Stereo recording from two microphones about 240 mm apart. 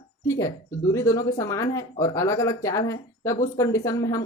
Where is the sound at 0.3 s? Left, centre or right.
Centre.